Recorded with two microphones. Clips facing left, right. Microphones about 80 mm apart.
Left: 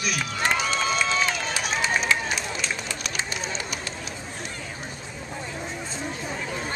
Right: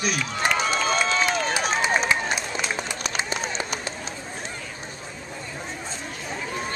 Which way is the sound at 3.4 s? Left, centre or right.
Right.